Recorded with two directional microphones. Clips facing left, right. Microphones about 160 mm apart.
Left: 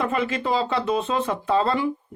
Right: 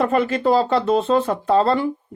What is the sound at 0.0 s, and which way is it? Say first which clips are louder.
Speech: right 6 dB; 45° right (ahead or behind).